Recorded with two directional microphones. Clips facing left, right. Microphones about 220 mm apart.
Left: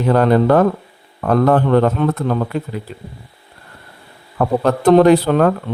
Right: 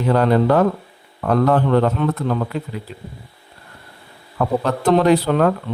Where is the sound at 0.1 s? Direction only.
50° left (ahead or behind).